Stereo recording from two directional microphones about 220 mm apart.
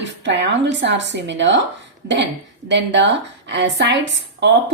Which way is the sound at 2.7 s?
55° right (ahead or behind).